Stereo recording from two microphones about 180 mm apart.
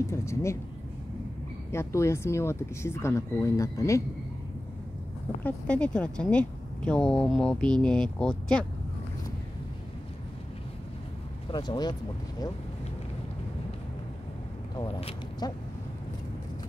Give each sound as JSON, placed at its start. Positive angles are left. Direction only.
{"t": 0.0, "sound": "speech", "side_deg": 15}
{"t": 1.7, "sound": "speech", "side_deg": 15}
{"t": 5.4, "sound": "speech", "side_deg": 5}
{"t": 11.5, "sound": "speech", "side_deg": 25}
{"t": 15.0, "sound": "speech", "side_deg": 30}